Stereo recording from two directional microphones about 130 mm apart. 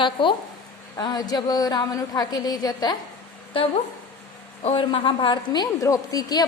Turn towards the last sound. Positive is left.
turn(degrees=30)  # may be behind; listen again after turning